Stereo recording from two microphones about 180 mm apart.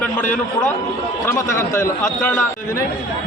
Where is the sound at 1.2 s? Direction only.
15° left (ahead or behind).